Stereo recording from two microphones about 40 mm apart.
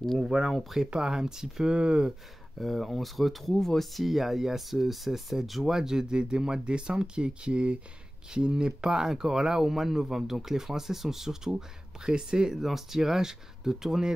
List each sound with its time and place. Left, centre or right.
0.2 s speech: centre
2.6 s speech: centre
12.5 s speech: centre